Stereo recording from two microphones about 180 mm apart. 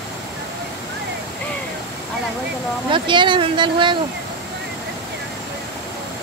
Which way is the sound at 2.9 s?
25° right (ahead or behind).